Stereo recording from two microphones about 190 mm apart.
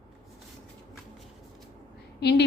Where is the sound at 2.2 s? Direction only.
60° left (ahead or behind).